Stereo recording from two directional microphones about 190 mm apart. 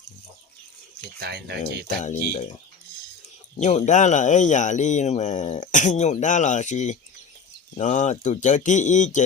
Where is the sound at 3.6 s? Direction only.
40° left (ahead or behind).